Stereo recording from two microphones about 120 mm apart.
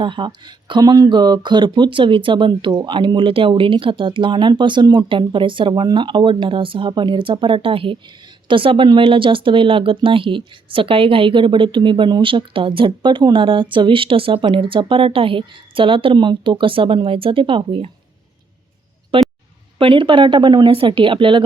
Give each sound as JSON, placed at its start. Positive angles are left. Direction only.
{"t": 0.0, "sound": "speech", "side_deg": -40}
{"t": 19.1, "sound": "a sound", "side_deg": -50}
{"t": 19.8, "sound": "speech", "side_deg": -45}